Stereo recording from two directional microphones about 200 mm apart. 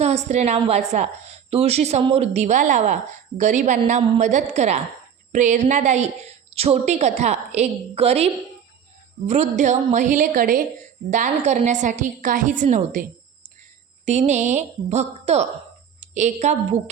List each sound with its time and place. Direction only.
0.0 s a woman's voice: 35° right (ahead or behind)